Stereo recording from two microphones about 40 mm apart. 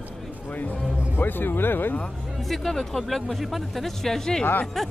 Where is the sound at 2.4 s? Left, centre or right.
Centre.